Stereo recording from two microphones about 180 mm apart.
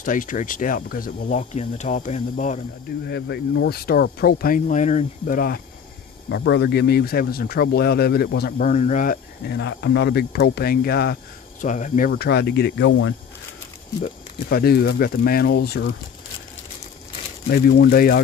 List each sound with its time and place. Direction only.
0.0 s speech: 45° left (ahead or behind)
3.1 s speech: 65° left (ahead or behind); by 5.6 s 50° left (ahead or behind)
6.2 s speech: 80° left; by 9.6 s 50° left (ahead or behind)
9.6 s speech: 75° left (ahead or behind)
11.6 s speech: 45° left (ahead or behind)
12.1 s speech: 65° left (ahead or behind); by 13.1 s 90° left
14.0 s speech: 60° left (ahead or behind)
17.5 s speech: 55° left (ahead or behind)